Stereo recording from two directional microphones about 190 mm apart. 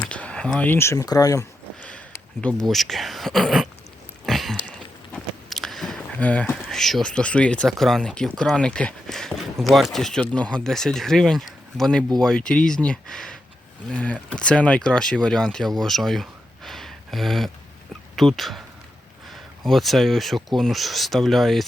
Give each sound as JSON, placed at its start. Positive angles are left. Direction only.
{"t": 0.0, "sound": "speech", "side_deg": 5}
{"t": 1.8, "sound": "speech", "side_deg": 5}
{"t": 4.3, "sound": "a sound", "side_deg": 0}
{"t": 5.1, "sound": "speech", "side_deg": 0}
{"t": 16.6, "sound": "a sound", "side_deg": 0}
{"t": 18.2, "sound": "speech", "side_deg": 0}